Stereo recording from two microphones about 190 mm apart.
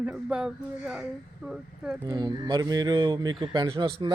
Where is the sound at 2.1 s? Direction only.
20° right (ahead or behind).